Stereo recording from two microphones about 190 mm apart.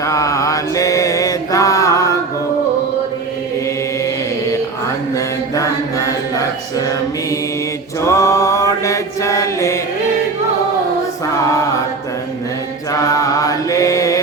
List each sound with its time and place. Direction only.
0.0 s mantra: 15° left (ahead or behind)
4.0 s mantra: 15° left (ahead or behind)
5.1 s music: 15° left (ahead or behind)
8.0 s mantra: 15° left (ahead or behind)
12.9 s mantra: 15° left (ahead or behind)